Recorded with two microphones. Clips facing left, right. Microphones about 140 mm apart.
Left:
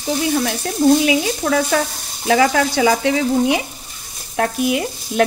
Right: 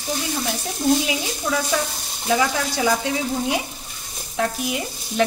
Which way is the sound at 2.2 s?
80° left.